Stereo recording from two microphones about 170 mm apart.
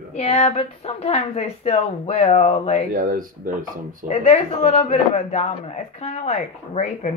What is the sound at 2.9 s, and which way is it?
Speech, 55° right (ahead or behind).